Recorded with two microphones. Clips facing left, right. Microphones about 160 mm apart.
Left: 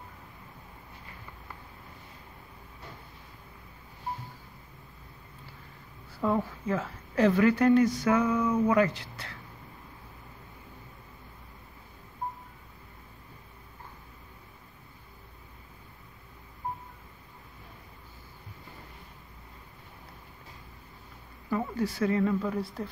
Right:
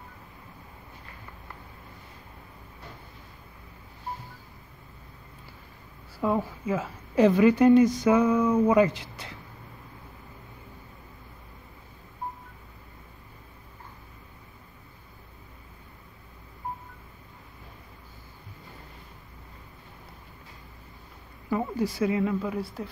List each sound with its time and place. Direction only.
6.2 s a woman's voice: 5° right (ahead or behind)
21.5 s a woman's voice: 15° right (ahead or behind)